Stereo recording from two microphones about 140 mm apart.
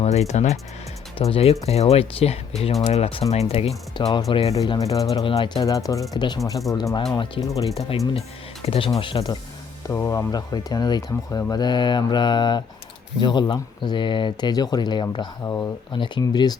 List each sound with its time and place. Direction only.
0.0 s speech: 50° left (ahead or behind)
4.0 s speech: 30° left (ahead or behind)
4.5 s speech: 25° left (ahead or behind)
5.2 s speech: 40° left (ahead or behind)
5.6 s speech: 25° left (ahead or behind)
8.6 s speech: 40° left (ahead or behind)
9.8 s speech: 20° left (ahead or behind)